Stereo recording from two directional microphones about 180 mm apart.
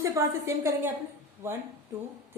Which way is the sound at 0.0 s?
15° right (ahead or behind).